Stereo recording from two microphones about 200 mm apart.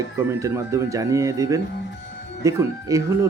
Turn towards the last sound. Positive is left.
turn(degrees=-15)  # may be behind; listen again after turning